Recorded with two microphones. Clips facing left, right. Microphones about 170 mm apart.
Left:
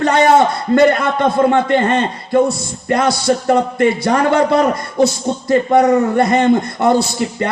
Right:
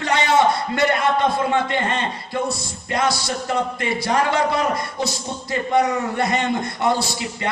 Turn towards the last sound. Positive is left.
turn(degrees=50)  # may be behind; listen again after turning